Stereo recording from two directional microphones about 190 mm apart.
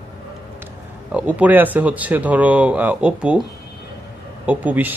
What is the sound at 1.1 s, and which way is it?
Speech, 5° right (ahead or behind).